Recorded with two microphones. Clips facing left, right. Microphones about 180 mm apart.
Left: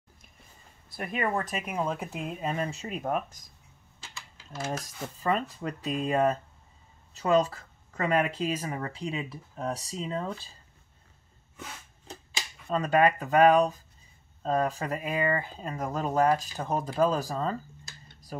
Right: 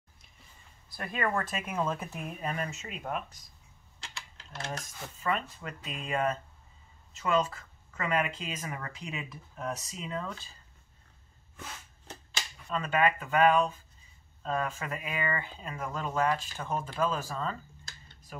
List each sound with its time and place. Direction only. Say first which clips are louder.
0.8 s speech: left 2 dB; 20° left (ahead or behind); by 3.4 s 45° left (ahead or behind)
4.6 s speech: left 5 dB; 35° left (ahead or behind)
12.6 s speech: left 5 dB; 40° left (ahead or behind)